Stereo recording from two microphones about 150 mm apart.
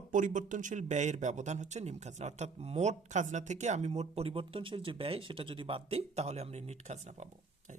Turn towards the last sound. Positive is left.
turn(degrees=-50)  # may be behind; listen again after turning